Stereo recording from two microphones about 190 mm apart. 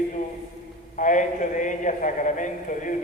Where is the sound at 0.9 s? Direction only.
40° left (ahead or behind).